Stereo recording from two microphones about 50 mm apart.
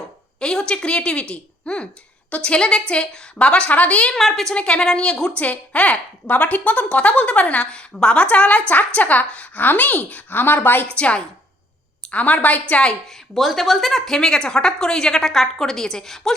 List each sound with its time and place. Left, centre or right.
0.3 s a woman's voice: centre
4.1 s a woman's voice: centre
4.5 s a woman's voice: centre
5.4 s a woman's voice: left
10.8 s a woman's voice: left
12.9 s a woman's voice: centre